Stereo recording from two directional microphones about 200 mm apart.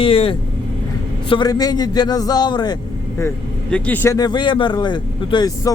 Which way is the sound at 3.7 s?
10° left (ahead or behind).